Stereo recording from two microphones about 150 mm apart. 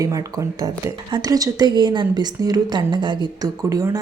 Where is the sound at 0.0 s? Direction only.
20° right (ahead or behind).